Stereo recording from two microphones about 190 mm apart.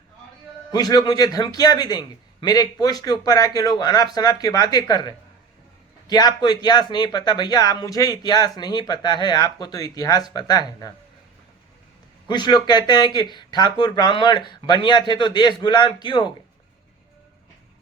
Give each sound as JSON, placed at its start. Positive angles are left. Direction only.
{"t": 0.7, "sound": "speech", "side_deg": 20}
{"t": 12.3, "sound": "speech", "side_deg": 25}